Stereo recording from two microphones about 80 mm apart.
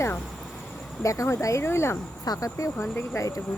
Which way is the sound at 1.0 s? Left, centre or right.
Left.